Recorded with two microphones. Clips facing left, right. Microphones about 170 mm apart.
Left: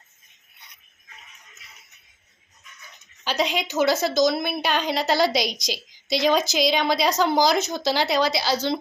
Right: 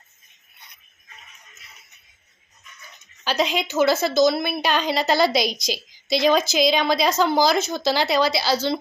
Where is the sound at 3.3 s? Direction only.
15° left (ahead or behind).